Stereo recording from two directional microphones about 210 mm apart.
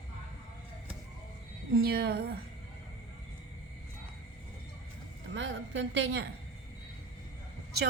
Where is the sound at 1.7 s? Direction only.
45° right (ahead or behind).